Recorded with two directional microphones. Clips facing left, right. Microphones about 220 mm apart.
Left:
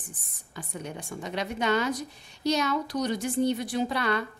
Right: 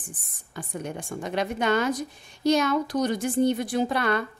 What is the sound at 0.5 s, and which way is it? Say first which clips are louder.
A woman's voice: right 4 dB; 50° right (ahead or behind).